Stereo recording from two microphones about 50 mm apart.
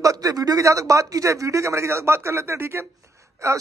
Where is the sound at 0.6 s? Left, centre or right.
Right.